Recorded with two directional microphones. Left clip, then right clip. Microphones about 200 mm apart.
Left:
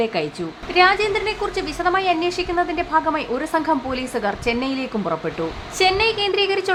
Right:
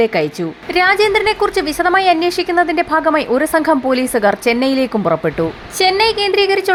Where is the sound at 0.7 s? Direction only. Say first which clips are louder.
Right 4 dB; 30° right (ahead or behind).